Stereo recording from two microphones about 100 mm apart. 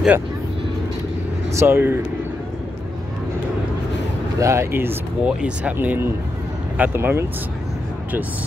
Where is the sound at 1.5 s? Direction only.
25° right (ahead or behind).